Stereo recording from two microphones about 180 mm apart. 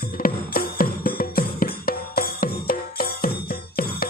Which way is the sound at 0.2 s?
55° left (ahead or behind).